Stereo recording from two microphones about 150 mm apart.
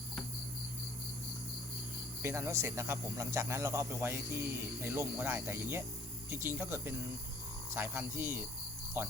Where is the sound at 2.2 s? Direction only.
20° right (ahead or behind).